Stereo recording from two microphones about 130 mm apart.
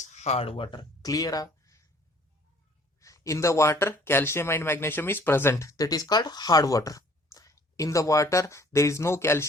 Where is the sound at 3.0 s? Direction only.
25° left (ahead or behind).